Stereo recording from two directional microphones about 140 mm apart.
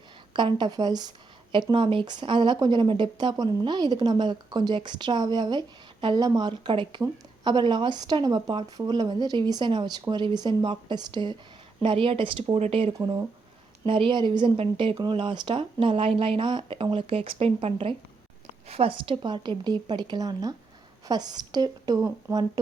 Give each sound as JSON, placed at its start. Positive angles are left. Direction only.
{"t": 0.3, "sound": "speech", "side_deg": -35}
{"t": 13.0, "sound": "speech", "side_deg": -25}
{"t": 13.8, "sound": "speech", "side_deg": -40}